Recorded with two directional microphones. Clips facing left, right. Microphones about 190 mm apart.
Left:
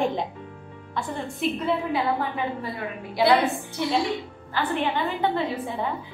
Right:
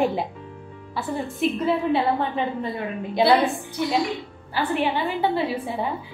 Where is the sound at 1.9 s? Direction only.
25° right (ahead or behind).